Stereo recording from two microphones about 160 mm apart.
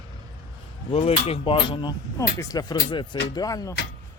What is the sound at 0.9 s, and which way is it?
Speech, 40° left (ahead or behind).